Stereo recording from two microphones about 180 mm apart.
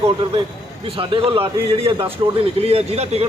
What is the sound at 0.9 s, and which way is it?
A man's voice, 30° right (ahead or behind).